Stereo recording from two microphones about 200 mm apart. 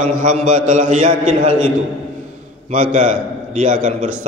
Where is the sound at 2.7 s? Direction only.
40° right (ahead or behind).